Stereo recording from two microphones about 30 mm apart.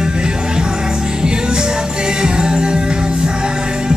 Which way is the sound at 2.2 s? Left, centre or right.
Right.